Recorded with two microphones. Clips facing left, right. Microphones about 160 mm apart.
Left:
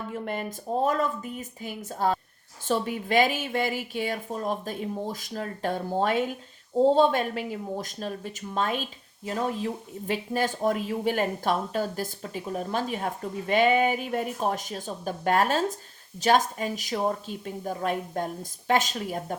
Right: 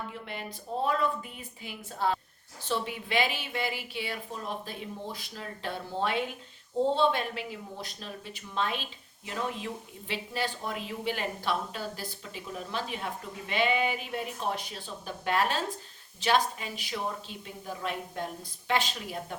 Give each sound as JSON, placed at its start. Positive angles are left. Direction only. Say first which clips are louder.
{"t": 0.1, "sound": "speech", "louder": "left 8 dB", "side_deg": 45}